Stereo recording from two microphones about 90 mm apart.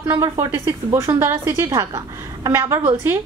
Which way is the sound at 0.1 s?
40° right (ahead or behind).